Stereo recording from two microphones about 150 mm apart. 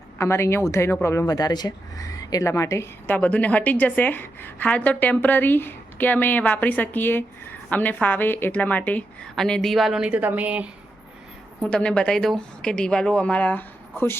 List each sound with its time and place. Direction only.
0.2 s a woman's voice: 15° left (ahead or behind); by 10.7 s 10° right (ahead or behind)
11.6 s speech: 5° left (ahead or behind)